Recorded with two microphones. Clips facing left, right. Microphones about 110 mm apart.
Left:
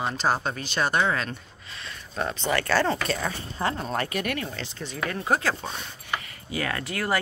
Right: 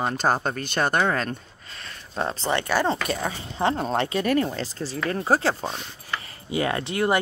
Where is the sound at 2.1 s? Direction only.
30° right (ahead or behind).